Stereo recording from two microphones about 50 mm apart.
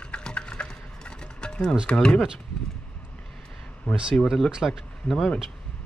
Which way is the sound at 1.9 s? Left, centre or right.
Left.